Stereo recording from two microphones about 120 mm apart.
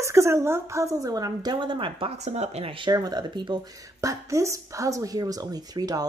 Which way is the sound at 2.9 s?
35° right (ahead or behind).